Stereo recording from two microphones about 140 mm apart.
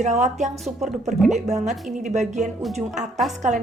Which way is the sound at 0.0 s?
55° right (ahead or behind).